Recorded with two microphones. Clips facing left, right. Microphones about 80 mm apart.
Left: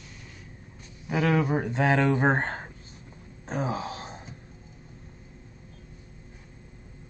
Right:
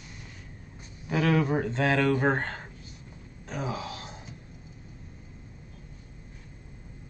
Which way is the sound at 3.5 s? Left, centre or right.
Left.